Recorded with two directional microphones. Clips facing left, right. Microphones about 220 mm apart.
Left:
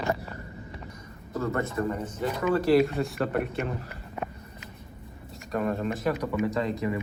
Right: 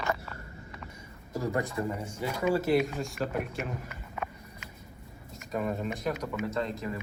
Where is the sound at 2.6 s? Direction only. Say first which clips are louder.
Left 5 dB; centre (ahead or behind).